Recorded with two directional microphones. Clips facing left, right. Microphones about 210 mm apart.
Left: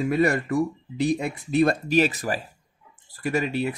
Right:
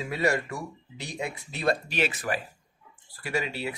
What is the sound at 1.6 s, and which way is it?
Speech, 45° left (ahead or behind).